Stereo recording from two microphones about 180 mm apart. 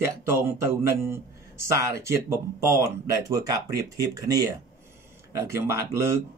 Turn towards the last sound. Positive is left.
turn(degrees=-15)  # may be behind; listen again after turning